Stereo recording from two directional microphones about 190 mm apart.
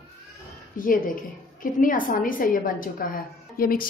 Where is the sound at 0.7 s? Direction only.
45° left (ahead or behind).